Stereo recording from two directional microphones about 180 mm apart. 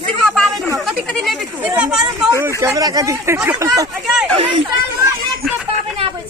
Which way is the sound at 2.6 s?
20° right (ahead or behind).